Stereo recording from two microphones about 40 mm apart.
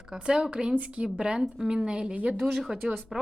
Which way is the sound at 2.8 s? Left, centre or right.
Right.